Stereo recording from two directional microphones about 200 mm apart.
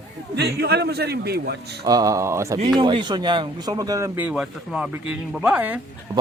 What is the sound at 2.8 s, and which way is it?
Speech, 25° right (ahead or behind).